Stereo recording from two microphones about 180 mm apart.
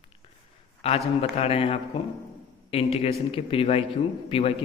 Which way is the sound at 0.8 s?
35° left (ahead or behind).